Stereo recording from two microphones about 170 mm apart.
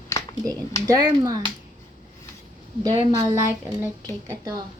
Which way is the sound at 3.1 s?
20° right (ahead or behind).